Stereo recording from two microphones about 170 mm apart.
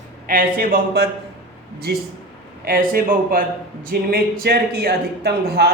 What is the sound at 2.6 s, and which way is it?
A man's voice, 60° right (ahead or behind).